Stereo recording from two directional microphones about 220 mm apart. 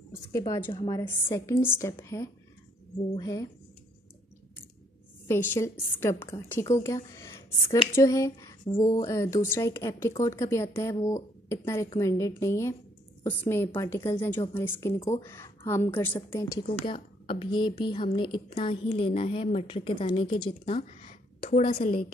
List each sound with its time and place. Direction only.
0.3 s a woman's voice: 15° left (ahead or behind)
5.3 s a woman's voice: 10° left (ahead or behind)
15.0 s a woman's voice: 25° left (ahead or behind)
15.2 s a woman's voice: 10° left (ahead or behind)